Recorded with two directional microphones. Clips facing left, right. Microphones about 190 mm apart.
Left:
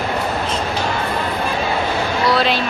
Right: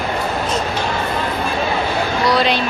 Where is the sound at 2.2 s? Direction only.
Centre (ahead or behind).